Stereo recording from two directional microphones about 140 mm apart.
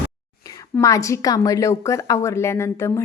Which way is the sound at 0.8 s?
20° left (ahead or behind).